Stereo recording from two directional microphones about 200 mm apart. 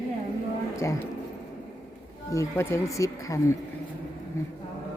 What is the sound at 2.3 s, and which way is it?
Speech, 15° left (ahead or behind).